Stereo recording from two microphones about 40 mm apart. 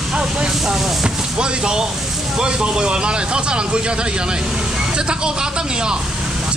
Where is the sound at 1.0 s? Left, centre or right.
Right.